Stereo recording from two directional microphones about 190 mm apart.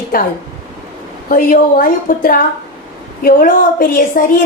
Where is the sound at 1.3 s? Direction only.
50° left (ahead or behind).